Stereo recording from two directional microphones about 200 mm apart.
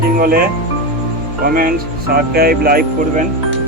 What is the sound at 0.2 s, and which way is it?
Speech, 45° right (ahead or behind).